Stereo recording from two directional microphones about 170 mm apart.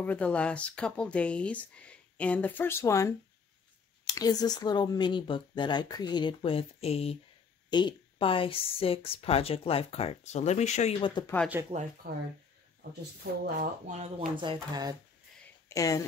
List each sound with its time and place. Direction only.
0.0 s speech: 10° left (ahead or behind); by 11.1 s 40° left (ahead or behind)
11.6 s speech: 15° right (ahead or behind)
12.0 s speech: 65° right (ahead or behind)
13.6 s speech: 45° right (ahead or behind)
14.3 s speech: 30° right (ahead or behind)
15.7 s speech: 20° left (ahead or behind)